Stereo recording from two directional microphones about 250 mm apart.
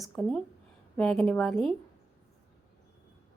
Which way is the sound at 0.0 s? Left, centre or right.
Centre.